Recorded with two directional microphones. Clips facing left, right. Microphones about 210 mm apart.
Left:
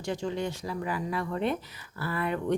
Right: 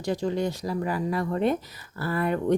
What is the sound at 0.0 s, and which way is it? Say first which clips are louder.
Speech: right 5 dB; 40° right (ahead or behind).